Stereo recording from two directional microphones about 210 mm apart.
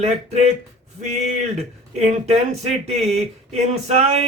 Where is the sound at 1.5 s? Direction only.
30° right (ahead or behind).